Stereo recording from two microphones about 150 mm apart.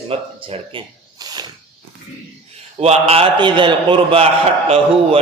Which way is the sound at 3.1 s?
35° right (ahead or behind).